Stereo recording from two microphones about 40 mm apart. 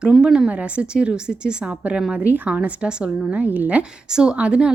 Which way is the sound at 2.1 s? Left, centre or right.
Right.